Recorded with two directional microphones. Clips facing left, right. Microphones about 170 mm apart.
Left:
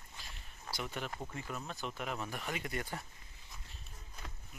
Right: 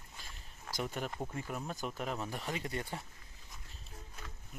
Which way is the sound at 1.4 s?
10° right (ahead or behind).